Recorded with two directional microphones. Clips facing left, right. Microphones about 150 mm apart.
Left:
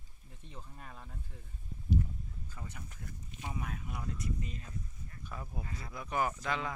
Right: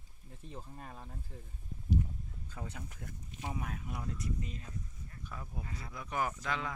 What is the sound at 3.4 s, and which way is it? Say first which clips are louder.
Speech: right 1 dB; 35° right (ahead or behind).